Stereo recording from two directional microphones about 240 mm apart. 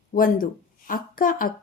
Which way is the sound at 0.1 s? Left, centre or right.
Left.